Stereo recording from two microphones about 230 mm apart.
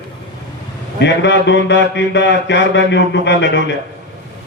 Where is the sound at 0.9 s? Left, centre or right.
Left.